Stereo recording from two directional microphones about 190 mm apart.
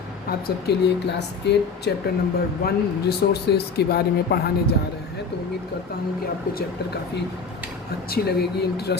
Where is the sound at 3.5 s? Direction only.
55° left (ahead or behind).